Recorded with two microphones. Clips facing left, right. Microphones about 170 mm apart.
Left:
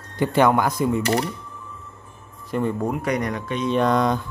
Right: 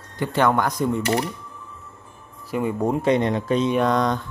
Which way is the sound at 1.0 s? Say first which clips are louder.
Left 1 dB; 35° left (ahead or behind).